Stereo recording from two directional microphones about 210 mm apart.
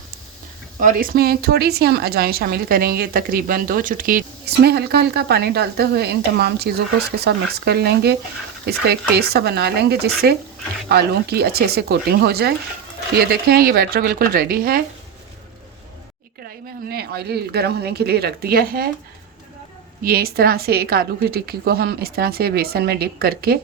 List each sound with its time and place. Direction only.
0.8 s a woman's voice: 40° right (ahead or behind)
16.9 s a woman's voice: 50° right (ahead or behind)
20.0 s a woman's voice: 45° right (ahead or behind)